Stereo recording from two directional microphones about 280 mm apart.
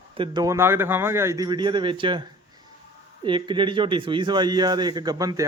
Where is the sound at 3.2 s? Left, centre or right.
Centre.